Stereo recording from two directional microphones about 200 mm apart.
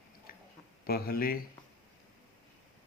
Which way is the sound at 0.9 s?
50° left (ahead or behind).